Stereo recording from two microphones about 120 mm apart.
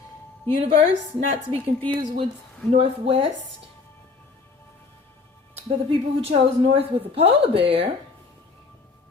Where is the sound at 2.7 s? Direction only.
50° right (ahead or behind).